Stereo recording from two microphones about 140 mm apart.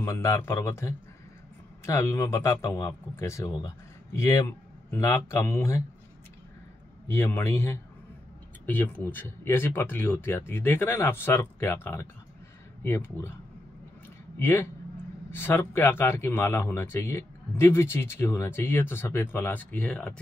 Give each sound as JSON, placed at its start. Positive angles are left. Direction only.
{"t": 0.0, "sound": "a man's voice", "side_deg": 20}
{"t": 7.1, "sound": "speech", "side_deg": 15}
{"t": 14.4, "sound": "speech", "side_deg": 20}